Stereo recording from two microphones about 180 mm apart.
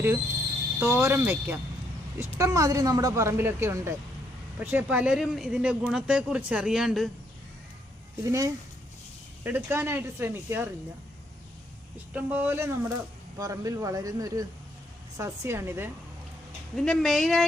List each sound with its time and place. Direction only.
0.8 s speech: 15° right (ahead or behind)
8.2 s speech: 20° right (ahead or behind)
12.1 s a man's voice: 10° right (ahead or behind)
16.7 s speech: centre (ahead or behind)